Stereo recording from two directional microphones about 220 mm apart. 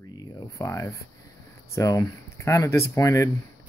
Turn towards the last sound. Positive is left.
turn(degrees=15)  # may be behind; listen again after turning